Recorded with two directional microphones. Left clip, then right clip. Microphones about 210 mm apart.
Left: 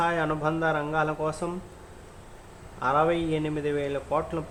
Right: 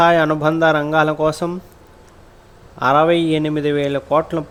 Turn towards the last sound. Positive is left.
turn(degrees=-40)  # may be behind; listen again after turning